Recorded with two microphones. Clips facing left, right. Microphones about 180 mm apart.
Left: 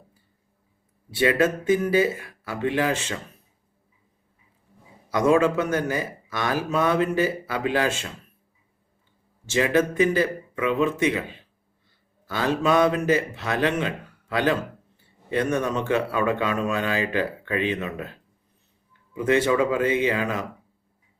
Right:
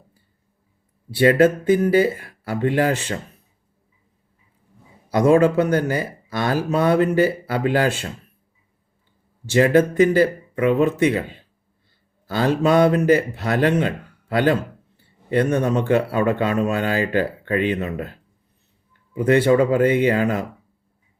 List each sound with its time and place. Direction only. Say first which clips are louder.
1.1 s speech: right 6 dB; 40° right (ahead or behind)
5.1 s speech: right 4 dB; 35° right (ahead or behind)
9.5 s speech: right 6 dB; 40° right (ahead or behind)
12.3 s speech: right 4 dB; 35° right (ahead or behind)
19.5 s speech: right 5 dB; 40° right (ahead or behind)
19.8 s speech: right 5 dB; 50° right (ahead or behind)
20.1 s speech: right 6 dB; 35° right (ahead or behind)